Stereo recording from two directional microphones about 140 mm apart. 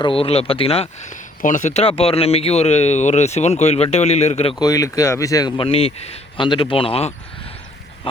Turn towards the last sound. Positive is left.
turn(degrees=45)  # may be behind; listen again after turning